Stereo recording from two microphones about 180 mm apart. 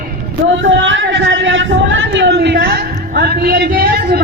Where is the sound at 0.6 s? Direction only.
90° right.